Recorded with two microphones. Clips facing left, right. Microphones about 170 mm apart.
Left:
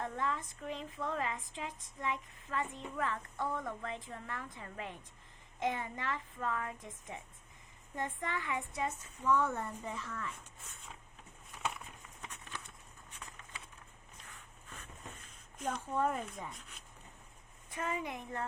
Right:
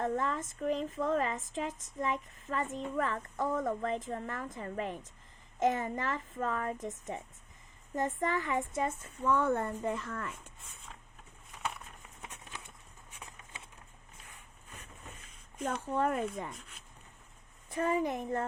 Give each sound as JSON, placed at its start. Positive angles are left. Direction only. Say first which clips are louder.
{"t": 0.0, "sound": "speech", "louder": "right 5 dB", "side_deg": -45}
{"t": 12.3, "sound": "a sound", "louder": "left 2 dB", "side_deg": -15}
{"t": 16.0, "sound": "speech", "louder": "right 4 dB", "side_deg": -70}
{"t": 16.6, "sound": "speech", "louder": "right 2 dB", "side_deg": 0}
{"t": 17.7, "sound": "speech", "louder": "right 8 dB", "side_deg": -40}